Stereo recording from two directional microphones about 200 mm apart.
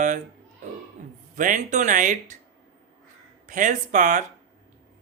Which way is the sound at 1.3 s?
40° right (ahead or behind).